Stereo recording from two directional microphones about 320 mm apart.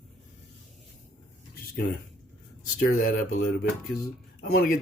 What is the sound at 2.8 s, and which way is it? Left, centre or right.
Speech, left.